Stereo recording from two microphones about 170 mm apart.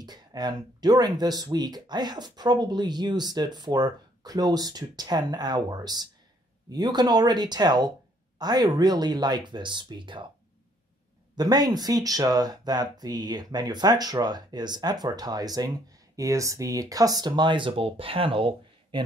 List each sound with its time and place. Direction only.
0.0 s speech: 25° right (ahead or behind)
11.3 s speech: 25° right (ahead or behind)